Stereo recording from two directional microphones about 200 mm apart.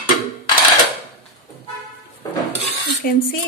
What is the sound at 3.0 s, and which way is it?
Speech, 45° left (ahead or behind).